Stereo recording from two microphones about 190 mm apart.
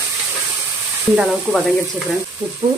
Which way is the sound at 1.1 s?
5° right (ahead or behind).